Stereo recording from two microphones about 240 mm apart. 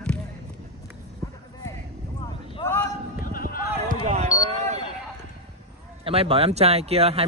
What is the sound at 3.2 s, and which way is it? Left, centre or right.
Run, left.